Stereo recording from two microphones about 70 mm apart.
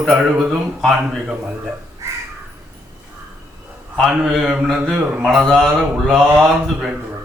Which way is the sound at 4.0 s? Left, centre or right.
Centre.